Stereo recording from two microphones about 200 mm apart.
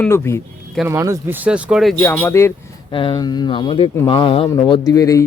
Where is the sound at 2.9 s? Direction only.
25° left (ahead or behind).